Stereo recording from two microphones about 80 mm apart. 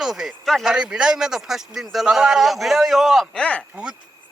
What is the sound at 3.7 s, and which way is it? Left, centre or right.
Speech, centre.